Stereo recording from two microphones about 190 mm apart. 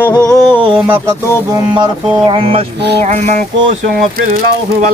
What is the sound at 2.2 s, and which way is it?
Music, 30° right (ahead or behind).